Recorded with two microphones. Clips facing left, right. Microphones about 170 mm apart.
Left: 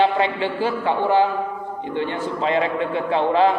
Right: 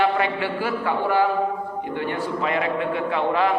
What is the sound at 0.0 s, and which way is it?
A man's voice, 25° left (ahead or behind).